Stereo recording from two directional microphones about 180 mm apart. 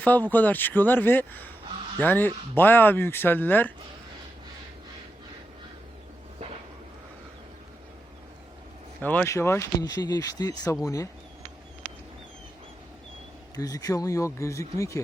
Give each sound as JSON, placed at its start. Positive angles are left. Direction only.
{"t": 0.0, "sound": "speech", "side_deg": 10}
{"t": 9.0, "sound": "speech", "side_deg": 10}
{"t": 13.6, "sound": "speech", "side_deg": 20}